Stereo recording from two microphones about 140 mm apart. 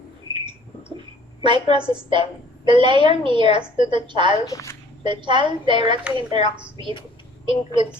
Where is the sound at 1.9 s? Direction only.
35° right (ahead or behind).